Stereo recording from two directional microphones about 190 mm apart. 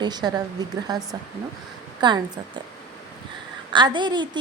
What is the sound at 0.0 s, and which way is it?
A woman's voice, 20° right (ahead or behind).